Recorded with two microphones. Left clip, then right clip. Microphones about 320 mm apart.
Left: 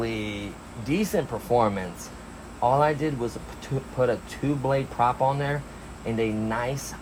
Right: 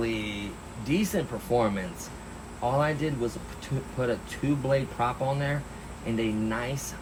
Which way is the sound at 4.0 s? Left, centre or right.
Left.